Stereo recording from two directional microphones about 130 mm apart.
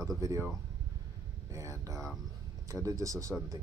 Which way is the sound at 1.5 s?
25° right (ahead or behind).